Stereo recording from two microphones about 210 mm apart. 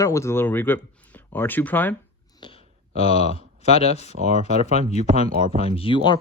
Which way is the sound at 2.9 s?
30° left (ahead or behind).